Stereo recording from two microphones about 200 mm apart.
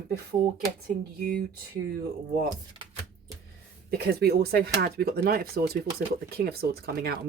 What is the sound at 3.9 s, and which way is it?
Speech, 50° right (ahead or behind).